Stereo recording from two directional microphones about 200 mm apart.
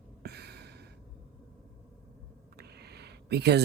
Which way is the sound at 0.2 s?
55° right (ahead or behind).